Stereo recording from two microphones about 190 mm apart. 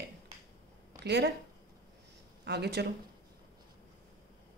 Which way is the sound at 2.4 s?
60° right (ahead or behind).